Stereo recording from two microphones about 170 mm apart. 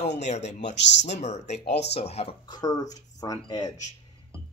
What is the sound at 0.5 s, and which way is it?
Speech, 45° left (ahead or behind).